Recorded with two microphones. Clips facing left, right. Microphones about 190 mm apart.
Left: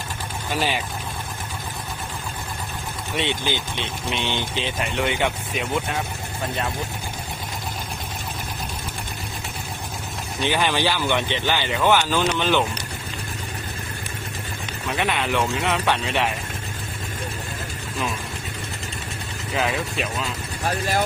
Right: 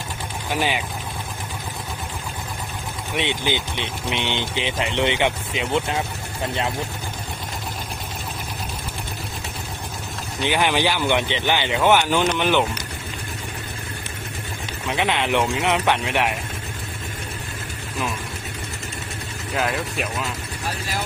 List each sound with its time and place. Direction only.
0.5 s speech: 15° right (ahead or behind)
3.2 s speech: 15° right (ahead or behind)
10.4 s speech: 15° right (ahead or behind)
14.8 s speech: 15° right (ahead or behind)
19.5 s speech: centre (ahead or behind)
20.7 s speech: 50° left (ahead or behind)